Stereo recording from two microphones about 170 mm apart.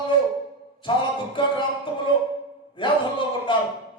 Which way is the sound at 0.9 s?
30° left (ahead or behind).